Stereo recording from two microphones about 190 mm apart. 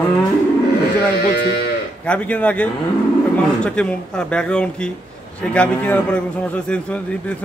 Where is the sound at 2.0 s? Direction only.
5° left (ahead or behind).